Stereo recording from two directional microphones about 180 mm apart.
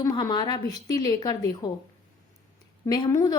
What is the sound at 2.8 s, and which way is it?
Speech, 20° left (ahead or behind).